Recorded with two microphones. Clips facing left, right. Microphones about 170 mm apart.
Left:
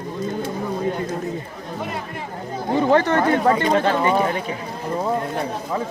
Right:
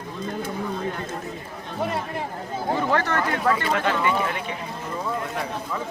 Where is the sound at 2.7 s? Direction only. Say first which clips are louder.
Left 8 dB; 25° left (ahead or behind).